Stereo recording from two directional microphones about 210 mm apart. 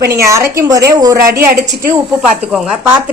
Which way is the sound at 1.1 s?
45° right (ahead or behind).